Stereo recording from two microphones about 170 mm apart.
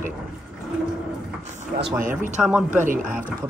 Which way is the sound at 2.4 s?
5° right (ahead or behind).